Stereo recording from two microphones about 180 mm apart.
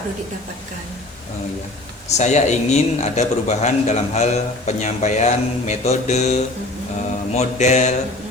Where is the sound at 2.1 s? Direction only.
40° left (ahead or behind).